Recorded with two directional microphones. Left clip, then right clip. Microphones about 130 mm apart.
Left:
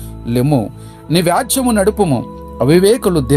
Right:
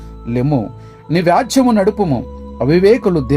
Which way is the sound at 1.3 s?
20° left (ahead or behind).